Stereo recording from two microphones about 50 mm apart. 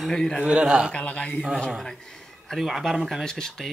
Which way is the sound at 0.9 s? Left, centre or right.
Left.